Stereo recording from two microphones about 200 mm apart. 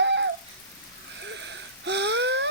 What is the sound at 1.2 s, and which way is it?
Wheeze, 65° right (ahead or behind).